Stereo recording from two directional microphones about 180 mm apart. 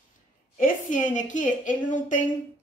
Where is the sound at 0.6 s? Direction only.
45° left (ahead or behind).